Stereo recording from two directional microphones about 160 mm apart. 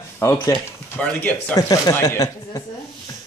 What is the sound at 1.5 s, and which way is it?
Speech, 25° left (ahead or behind).